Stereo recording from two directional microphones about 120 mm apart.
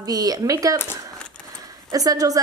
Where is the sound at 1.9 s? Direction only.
30° right (ahead or behind).